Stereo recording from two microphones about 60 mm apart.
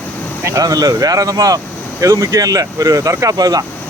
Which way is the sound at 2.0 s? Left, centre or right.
Right.